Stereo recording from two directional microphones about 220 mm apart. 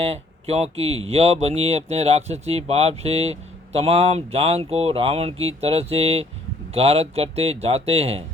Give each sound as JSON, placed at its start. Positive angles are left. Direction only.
{"t": 0.0, "sound": "speech", "side_deg": -30}